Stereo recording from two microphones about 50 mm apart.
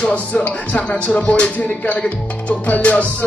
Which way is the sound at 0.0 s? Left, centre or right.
Left.